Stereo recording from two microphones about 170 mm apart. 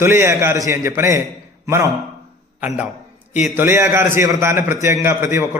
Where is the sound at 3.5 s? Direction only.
15° right (ahead or behind).